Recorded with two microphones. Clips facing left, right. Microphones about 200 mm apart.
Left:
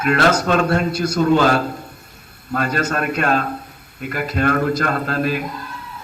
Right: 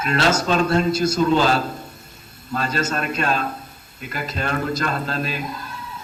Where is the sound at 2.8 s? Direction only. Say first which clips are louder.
Left 3 dB; 60° left (ahead or behind).